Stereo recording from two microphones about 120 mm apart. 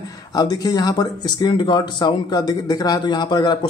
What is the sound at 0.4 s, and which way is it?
Speech, 30° left (ahead or behind).